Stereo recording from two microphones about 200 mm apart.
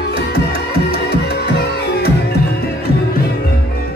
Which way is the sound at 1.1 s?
55° left (ahead or behind).